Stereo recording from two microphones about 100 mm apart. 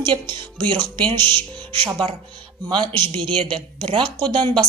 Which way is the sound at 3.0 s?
55° right (ahead or behind).